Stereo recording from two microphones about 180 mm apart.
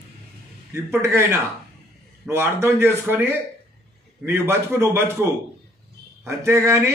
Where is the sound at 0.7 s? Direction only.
15° right (ahead or behind).